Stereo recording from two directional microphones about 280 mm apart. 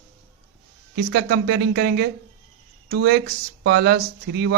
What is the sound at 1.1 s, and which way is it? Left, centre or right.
Speech, right.